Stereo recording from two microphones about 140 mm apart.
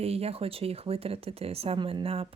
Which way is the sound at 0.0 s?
45° right (ahead or behind).